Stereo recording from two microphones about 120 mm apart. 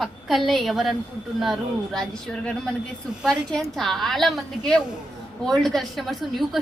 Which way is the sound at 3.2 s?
5° left (ahead or behind).